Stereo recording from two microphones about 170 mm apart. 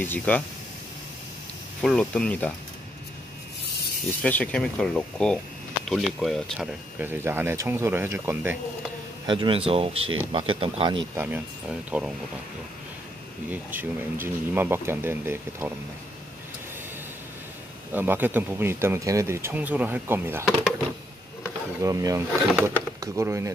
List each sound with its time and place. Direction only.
0.0 s speech: 10° left (ahead or behind)
1.8 s speech: 5° left (ahead or behind)
4.2 s speech: 10° left (ahead or behind)
7.0 s speech: 15° right (ahead or behind)
9.2 s speech: 30° right (ahead or behind)
11.1 s speech: 10° right (ahead or behind)
13.5 s speech: 10° right (ahead or behind)
17.9 s speech: 10° right (ahead or behind)
21.8 s speech: 20° right (ahead or behind)